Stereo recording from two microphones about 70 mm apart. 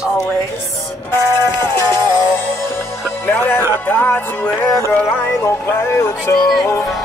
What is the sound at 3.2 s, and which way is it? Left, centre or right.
Music, left.